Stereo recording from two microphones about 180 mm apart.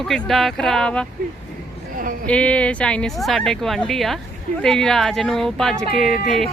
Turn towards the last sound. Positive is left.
turn(degrees=0)  # may be behind; listen again after turning